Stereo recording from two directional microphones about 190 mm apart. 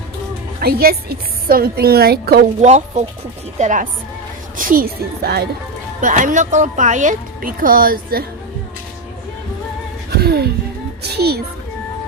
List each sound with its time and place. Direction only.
0.6 s a woman's voice: 55° right (ahead or behind)
2.6 s speech: 35° right (ahead or behind); by 5.5 s 55° right (ahead or behind)
6.0 s speech: 40° right (ahead or behind)
10.1 s a woman's voice: 55° right (ahead or behind)